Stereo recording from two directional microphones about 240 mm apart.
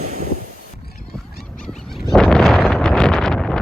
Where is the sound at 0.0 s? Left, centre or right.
Right.